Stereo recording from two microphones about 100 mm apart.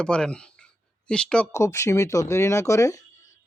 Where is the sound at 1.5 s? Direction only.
30° left (ahead or behind).